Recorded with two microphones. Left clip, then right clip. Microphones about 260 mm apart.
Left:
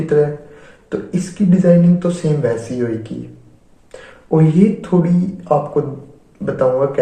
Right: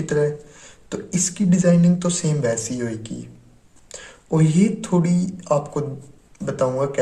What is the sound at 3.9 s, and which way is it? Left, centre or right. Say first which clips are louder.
Speech: left 7 dB; right.